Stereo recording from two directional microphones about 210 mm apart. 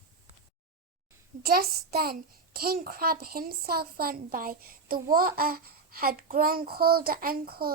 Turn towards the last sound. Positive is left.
turn(degrees=-45)  # may be behind; listen again after turning